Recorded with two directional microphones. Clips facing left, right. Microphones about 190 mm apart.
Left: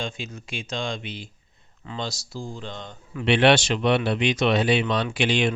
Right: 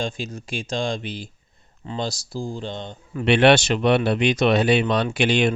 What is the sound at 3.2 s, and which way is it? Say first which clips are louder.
Speech: right 3 dB; 55° right (ahead or behind).